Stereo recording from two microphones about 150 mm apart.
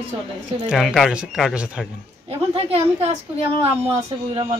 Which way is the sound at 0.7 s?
5° right (ahead or behind).